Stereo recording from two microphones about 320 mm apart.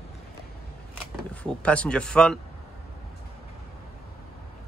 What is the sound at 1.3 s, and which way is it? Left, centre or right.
Speech, centre.